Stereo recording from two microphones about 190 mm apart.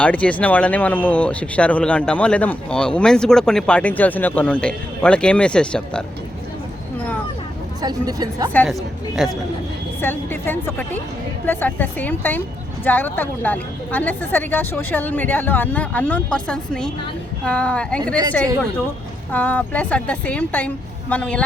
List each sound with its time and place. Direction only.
0.0 s speech: 5° left (ahead or behind)
7.8 s speech: 20° right (ahead or behind)
8.5 s speech: centre (ahead or behind)
19.3 s speech: 10° left (ahead or behind)